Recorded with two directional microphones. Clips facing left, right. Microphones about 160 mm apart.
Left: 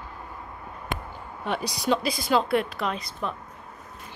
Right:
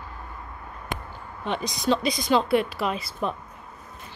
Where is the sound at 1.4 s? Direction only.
10° left (ahead or behind).